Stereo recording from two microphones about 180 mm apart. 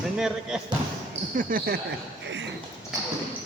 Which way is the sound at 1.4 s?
50° right (ahead or behind).